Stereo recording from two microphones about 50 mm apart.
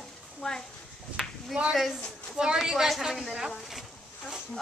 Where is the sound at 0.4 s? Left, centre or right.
Centre.